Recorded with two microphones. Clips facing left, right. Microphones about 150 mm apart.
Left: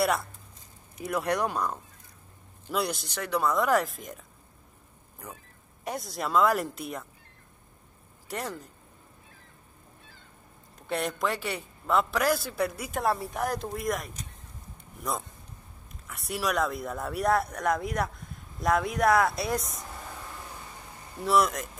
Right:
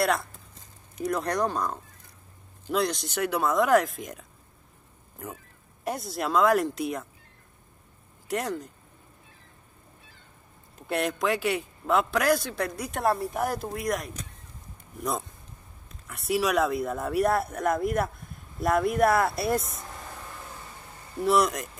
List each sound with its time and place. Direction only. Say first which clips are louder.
1.0 s a man's voice: right 1 dB; 5° left (ahead or behind)
5.9 s a man's voice: right 3 dB; centre (ahead or behind)
8.3 s a man's voice: right 5 dB; centre (ahead or behind)
10.9 s a man's voice: right 3 dB; centre (ahead or behind)
16.1 s a man's voice: right 5 dB; centre (ahead or behind)
21.3 s a man's voice: right 1 dB; centre (ahead or behind)